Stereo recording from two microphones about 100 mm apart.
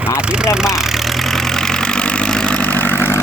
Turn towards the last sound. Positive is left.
turn(degrees=25)  # may be behind; listen again after turning